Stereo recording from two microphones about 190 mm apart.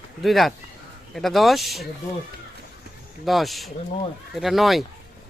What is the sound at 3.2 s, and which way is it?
Speech, centre (ahead or behind).